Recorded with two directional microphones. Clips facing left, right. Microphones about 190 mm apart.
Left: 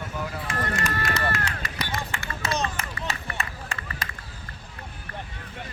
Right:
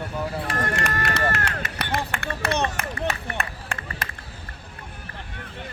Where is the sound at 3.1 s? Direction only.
55° right (ahead or behind).